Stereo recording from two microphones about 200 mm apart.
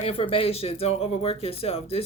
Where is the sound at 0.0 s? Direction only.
30° left (ahead or behind).